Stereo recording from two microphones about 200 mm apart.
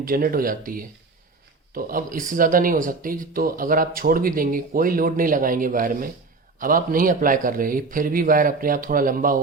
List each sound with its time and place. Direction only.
0.0 s speech: 45° right (ahead or behind)